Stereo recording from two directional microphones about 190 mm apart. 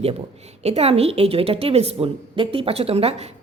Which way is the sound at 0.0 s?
30° right (ahead or behind).